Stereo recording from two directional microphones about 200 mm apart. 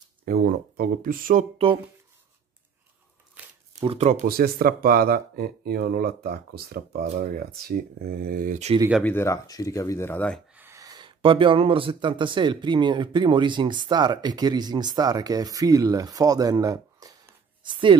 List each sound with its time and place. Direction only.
0.2 s speech: 50° right (ahead or behind)
3.8 s speech: 30° right (ahead or behind)
4.3 s speech: 45° right (ahead or behind)
9.0 s speech: 10° left (ahead or behind)
10.5 s speech: 10° right (ahead or behind)